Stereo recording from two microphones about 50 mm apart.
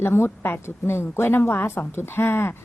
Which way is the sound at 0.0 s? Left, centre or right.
Left.